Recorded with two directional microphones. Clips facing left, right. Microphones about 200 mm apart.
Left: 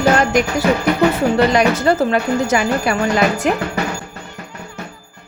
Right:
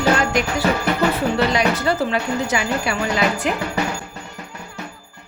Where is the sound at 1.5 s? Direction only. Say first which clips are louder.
Left 5 dB; 45° left (ahead or behind).